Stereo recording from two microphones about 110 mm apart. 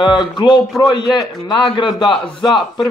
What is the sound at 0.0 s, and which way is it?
A man's voice, 40° left (ahead or behind).